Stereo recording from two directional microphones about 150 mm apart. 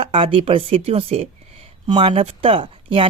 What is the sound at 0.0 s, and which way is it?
A woman's voice, 35° right (ahead or behind).